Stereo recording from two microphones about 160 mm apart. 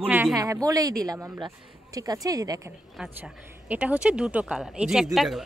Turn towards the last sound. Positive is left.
turn(degrees=0)  # may be behind; listen again after turning